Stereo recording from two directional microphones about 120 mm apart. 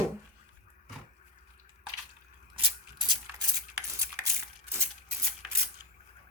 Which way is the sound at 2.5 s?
45° right (ahead or behind).